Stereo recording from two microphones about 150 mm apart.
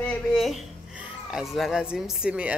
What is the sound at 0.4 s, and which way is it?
Speech, centre (ahead or behind).